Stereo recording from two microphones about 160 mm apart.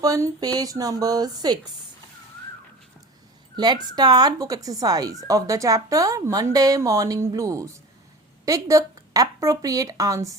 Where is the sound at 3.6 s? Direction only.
25° right (ahead or behind).